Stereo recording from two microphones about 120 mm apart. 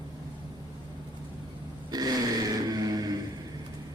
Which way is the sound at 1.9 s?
35° right (ahead or behind).